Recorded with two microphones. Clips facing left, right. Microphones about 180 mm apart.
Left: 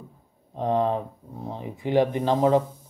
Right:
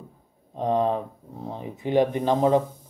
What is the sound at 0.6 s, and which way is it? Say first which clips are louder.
Speech: even; 20° right (ahead or behind).